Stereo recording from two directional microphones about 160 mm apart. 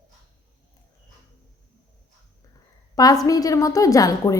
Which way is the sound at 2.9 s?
20° left (ahead or behind).